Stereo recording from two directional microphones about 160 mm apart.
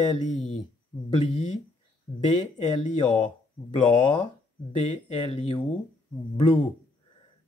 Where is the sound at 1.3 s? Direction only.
45° left (ahead or behind).